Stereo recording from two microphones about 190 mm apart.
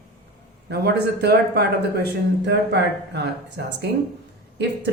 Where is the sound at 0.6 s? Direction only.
60° right (ahead or behind).